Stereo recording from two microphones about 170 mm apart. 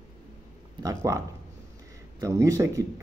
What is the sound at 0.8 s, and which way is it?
Speech, 20° right (ahead or behind).